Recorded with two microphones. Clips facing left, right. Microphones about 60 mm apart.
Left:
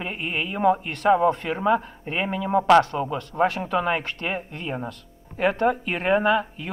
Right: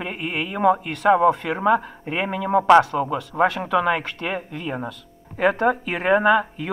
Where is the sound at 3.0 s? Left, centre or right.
Right.